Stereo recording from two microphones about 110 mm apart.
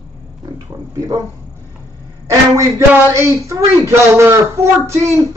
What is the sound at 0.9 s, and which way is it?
Speech, 30° right (ahead or behind).